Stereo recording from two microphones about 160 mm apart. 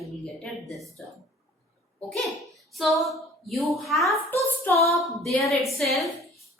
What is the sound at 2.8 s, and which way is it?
A woman's voice, centre (ahead or behind).